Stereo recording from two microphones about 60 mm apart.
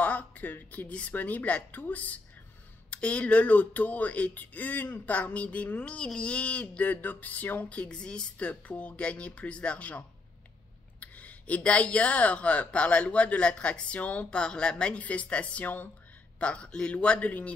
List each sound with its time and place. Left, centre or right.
0.0 s a sound: left
0.7 s speech: left
7.8 s speech: centre